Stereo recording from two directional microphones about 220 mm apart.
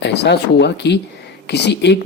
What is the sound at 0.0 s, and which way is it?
Speech, 50° left (ahead or behind).